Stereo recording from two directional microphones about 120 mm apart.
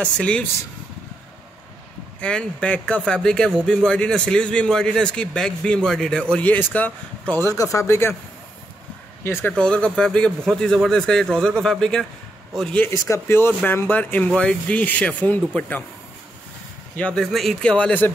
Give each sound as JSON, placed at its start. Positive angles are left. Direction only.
{"t": 0.0, "sound": "a man's voice", "side_deg": 10}
{"t": 2.1, "sound": "a man's voice", "side_deg": 10}
{"t": 9.2, "sound": "speech", "side_deg": 20}
{"t": 9.5, "sound": "speech", "side_deg": 10}
{"t": 12.8, "sound": "a man's voice", "side_deg": 25}
{"t": 16.9, "sound": "a man's voice", "side_deg": 10}